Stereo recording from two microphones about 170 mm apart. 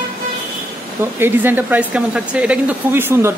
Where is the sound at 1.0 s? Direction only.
15° right (ahead or behind).